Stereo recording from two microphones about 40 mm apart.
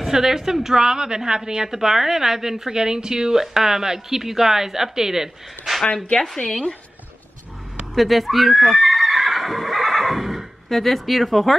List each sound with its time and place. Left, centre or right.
0.0 s a woman's voice: centre
6.3 s a woman's voice: centre
7.9 s neigh: centre